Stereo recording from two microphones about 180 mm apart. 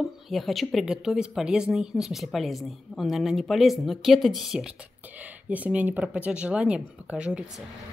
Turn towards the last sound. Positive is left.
turn(degrees=-5)  # may be behind; listen again after turning